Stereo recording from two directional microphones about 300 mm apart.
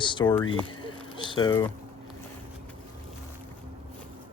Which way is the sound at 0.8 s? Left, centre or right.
Centre.